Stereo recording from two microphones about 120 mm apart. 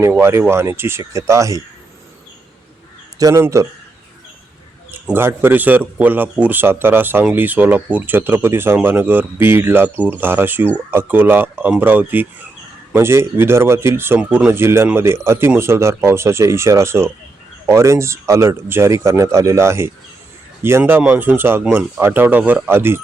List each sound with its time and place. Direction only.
0.2 s speech: 20° right (ahead or behind)
3.2 s a man's voice: 30° right (ahead or behind)
5.1 s a man's voice: 20° right (ahead or behind)